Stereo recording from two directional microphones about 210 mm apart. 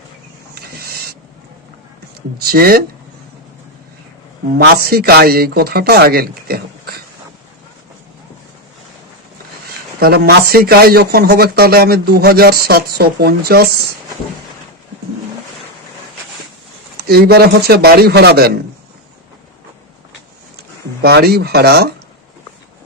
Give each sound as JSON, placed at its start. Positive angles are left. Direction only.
{"t": 2.4, "sound": "speech", "side_deg": -45}
{"t": 4.5, "sound": "speech", "side_deg": -50}
{"t": 10.0, "sound": "speech", "side_deg": -45}
{"t": 17.0, "sound": "speech", "side_deg": -50}
{"t": 21.0, "sound": "speech", "side_deg": -50}